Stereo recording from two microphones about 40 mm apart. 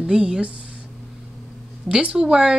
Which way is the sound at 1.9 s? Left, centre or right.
Right.